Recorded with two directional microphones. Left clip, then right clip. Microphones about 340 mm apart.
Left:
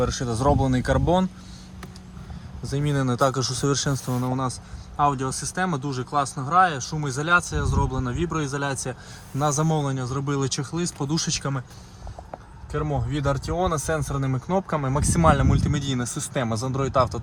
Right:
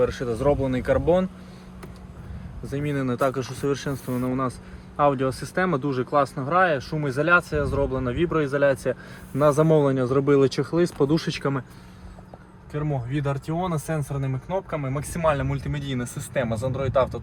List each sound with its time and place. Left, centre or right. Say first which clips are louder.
0.0 s speech: right 1 dB; centre
2.6 s speech: left 1 dB; centre
12.7 s speech: left 2 dB; left